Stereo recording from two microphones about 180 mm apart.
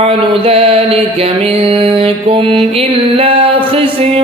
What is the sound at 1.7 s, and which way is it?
Music, 30° right (ahead or behind).